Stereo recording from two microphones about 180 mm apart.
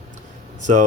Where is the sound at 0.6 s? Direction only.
45° right (ahead or behind).